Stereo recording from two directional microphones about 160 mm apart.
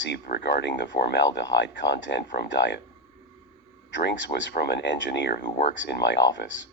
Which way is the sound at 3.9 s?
90° left.